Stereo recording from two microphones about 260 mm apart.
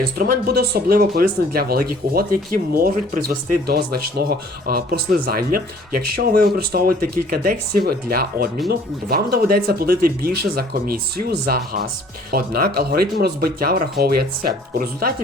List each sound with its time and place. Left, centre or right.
0.2 s speech: right
5.9 s speech: right
6.1 s speech: right